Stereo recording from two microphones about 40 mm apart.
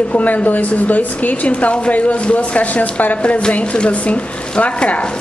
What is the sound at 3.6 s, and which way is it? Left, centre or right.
Speech, left.